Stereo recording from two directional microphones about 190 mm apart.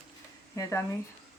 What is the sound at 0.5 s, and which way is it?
Speech, 15° left (ahead or behind).